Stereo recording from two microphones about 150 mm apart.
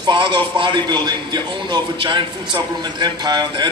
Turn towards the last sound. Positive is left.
turn(degrees=-30)  # may be behind; listen again after turning